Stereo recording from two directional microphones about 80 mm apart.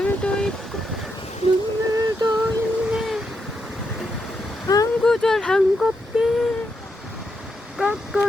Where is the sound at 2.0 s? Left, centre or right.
Right.